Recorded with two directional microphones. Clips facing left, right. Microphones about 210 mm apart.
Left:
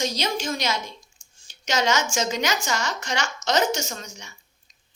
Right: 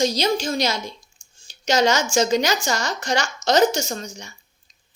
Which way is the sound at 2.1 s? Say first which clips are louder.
Right 6 dB; 35° right (ahead or behind).